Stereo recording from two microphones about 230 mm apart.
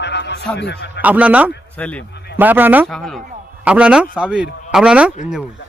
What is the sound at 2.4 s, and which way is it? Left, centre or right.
A man's voice, centre.